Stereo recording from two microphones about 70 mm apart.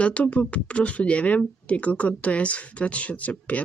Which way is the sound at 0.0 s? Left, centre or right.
Centre.